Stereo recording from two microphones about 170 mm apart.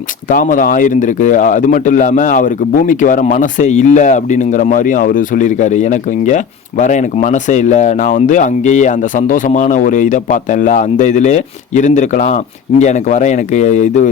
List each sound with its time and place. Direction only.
0.3 s speech: 50° left (ahead or behind)